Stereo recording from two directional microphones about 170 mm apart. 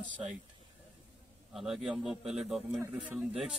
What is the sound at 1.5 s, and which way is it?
Speech, centre (ahead or behind).